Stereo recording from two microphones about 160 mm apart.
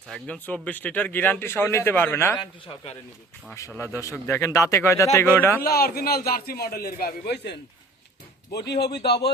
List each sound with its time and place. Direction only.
0.1 s speech: 5° left (ahead or behind)
3.5 s speech: 15° left (ahead or behind)
5.6 s a man's voice: 70° left (ahead or behind); by 7.5 s 90° left
8.5 s speech: 90° left